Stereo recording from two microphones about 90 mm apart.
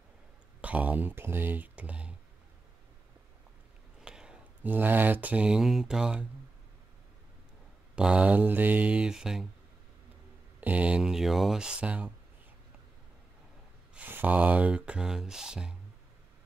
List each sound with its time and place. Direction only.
0.6 s speech: 15° right (ahead or behind)
4.0 s a sound: 10° right (ahead or behind)
4.7 s speech: 20° right (ahead or behind)
7.9 s speech: 10° right (ahead or behind)
10.6 s speech: 15° right (ahead or behind)
13.9 s speech: 20° right (ahead or behind)